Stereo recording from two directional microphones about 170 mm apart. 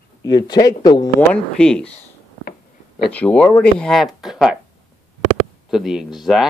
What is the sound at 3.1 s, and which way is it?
Speech, 5° left (ahead or behind).